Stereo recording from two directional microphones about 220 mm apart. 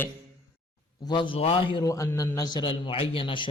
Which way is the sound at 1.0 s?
20° left (ahead or behind).